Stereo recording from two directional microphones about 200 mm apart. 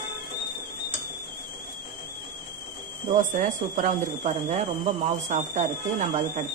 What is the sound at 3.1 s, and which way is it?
Speech, 40° right (ahead or behind).